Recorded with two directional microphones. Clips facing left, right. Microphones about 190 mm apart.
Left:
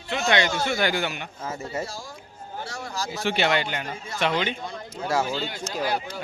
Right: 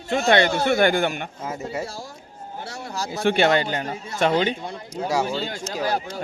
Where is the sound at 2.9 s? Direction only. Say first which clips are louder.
Right 6 dB; 55° right (ahead or behind).